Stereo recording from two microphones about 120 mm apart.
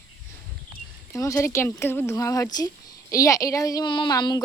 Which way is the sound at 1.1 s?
25° left (ahead or behind).